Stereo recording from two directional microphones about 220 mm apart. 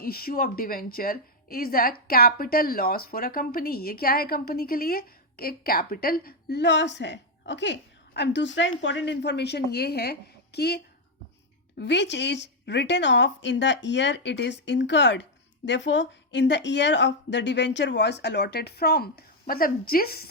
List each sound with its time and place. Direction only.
0.0 s a woman's voice: 45° left (ahead or behind)
11.8 s a woman's voice: 50° left (ahead or behind)